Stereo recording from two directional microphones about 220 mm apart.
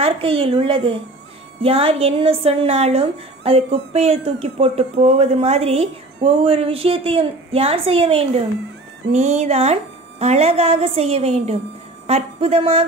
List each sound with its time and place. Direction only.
0.0 s speech: 25° right (ahead or behind)